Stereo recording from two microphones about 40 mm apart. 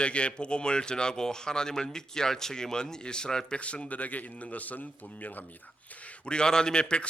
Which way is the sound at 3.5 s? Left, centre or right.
Left.